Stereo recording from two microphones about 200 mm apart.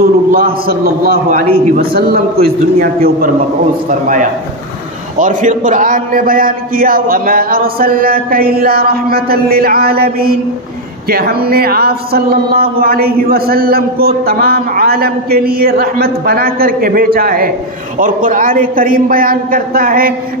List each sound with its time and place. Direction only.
0.3 s a man's voice: 45° right (ahead or behind)
5.2 s a man's voice: 40° right (ahead or behind)